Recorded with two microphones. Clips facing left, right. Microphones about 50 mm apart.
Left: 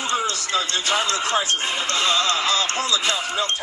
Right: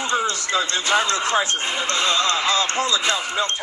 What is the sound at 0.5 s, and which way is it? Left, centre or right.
Speech, right.